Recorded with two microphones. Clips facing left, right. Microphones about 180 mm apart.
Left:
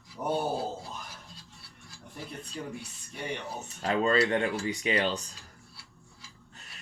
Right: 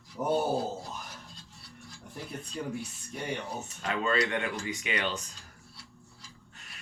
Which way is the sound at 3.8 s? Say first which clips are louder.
Left 4 dB; 35° left (ahead or behind).